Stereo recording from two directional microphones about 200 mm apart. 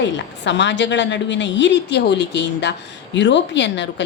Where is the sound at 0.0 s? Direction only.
60° left (ahead or behind).